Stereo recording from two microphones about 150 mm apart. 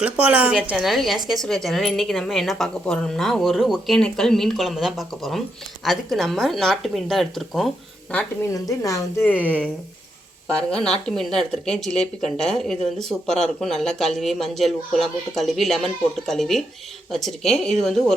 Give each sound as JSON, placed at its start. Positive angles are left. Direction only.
{"t": 0.0, "sound": "a woman's voice", "side_deg": -10}
{"t": 8.4, "sound": "a woman's voice", "side_deg": 20}
{"t": 10.8, "sound": "a woman's voice", "side_deg": 5}